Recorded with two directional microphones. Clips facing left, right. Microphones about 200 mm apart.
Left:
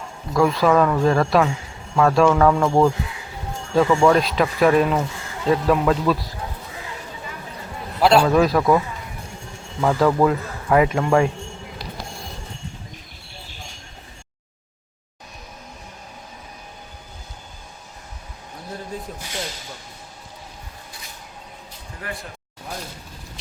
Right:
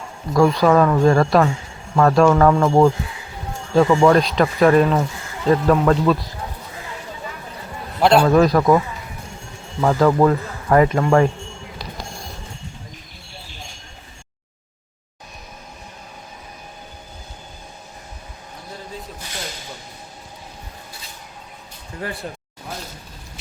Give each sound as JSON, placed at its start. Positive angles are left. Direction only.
{"t": 0.3, "sound": "speech", "side_deg": 0}
{"t": 8.0, "sound": "speech", "side_deg": 0}
{"t": 9.8, "sound": "speech", "side_deg": -5}